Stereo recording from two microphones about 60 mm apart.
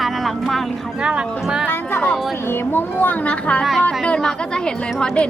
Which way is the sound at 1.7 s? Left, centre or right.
Left.